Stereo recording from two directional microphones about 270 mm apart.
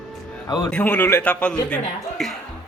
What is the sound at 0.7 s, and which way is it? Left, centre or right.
A man's voice, centre.